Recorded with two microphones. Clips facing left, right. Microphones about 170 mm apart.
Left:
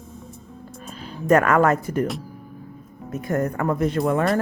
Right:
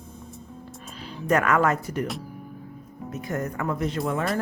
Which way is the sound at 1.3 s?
50° left (ahead or behind).